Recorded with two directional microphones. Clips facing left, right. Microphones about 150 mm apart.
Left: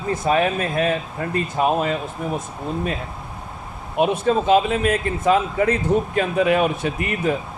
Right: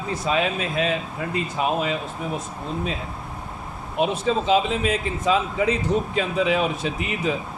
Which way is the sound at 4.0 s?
55° left (ahead or behind).